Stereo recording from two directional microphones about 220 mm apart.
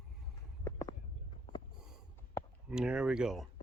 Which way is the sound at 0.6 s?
15° left (ahead or behind).